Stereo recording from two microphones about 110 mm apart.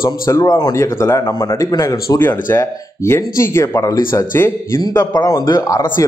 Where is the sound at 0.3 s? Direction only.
35° left (ahead or behind).